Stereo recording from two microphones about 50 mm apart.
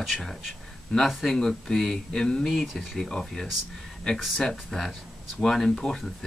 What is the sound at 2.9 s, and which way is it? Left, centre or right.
Speech, centre.